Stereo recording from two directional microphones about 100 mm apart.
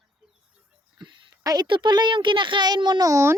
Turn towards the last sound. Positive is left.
turn(degrees=-30)  # may be behind; listen again after turning